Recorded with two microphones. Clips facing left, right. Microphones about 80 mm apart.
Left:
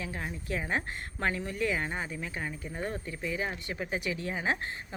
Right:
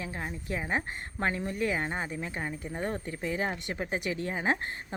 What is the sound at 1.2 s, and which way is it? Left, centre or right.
Speech, right.